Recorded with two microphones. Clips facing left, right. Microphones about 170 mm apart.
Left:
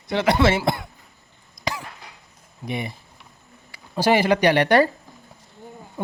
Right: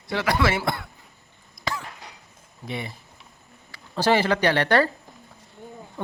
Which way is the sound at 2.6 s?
15° left (ahead or behind).